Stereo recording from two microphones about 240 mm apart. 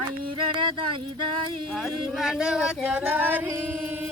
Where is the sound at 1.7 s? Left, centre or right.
Centre.